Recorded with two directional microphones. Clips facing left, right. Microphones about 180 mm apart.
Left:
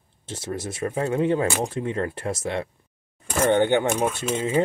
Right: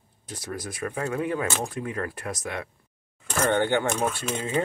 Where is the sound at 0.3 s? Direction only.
25° left (ahead or behind).